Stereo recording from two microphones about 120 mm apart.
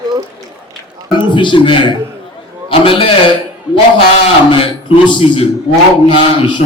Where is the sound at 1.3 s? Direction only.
40° left (ahead or behind).